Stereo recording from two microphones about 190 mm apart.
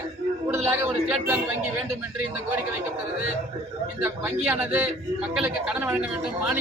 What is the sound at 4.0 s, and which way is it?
A woman's voice, 10° right (ahead or behind).